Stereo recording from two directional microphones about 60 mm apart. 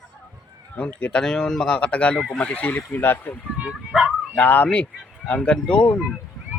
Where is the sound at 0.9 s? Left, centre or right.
Centre; by 3.3 s left.